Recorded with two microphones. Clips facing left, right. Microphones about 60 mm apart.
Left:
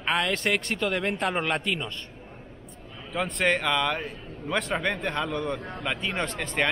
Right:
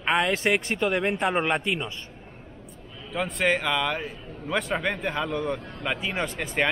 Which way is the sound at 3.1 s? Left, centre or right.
Centre.